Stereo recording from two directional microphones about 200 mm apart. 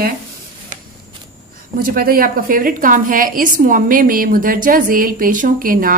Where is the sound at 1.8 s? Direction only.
45° right (ahead or behind).